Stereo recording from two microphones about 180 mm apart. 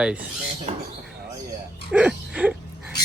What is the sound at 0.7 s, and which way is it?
Speech, 40° right (ahead or behind).